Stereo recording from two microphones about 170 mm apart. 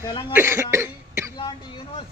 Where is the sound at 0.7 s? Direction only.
15° right (ahead or behind).